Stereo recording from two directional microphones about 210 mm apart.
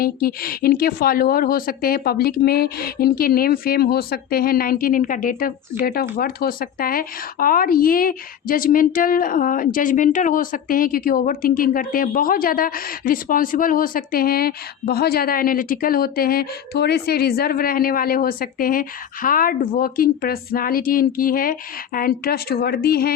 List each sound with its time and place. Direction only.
0.0 s speech: 45° left (ahead or behind)